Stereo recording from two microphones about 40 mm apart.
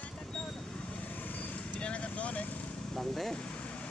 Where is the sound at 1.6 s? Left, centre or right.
Left.